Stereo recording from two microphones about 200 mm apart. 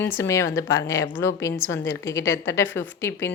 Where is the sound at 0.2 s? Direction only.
15° left (ahead or behind).